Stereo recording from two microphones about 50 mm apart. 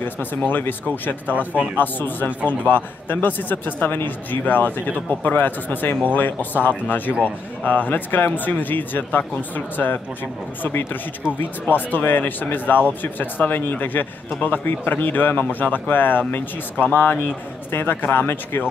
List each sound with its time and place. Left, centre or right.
0.0 s a man's voice: left
1.3 s speech: right
1.8 s a man's voice: left
17.6 s a man's voice: left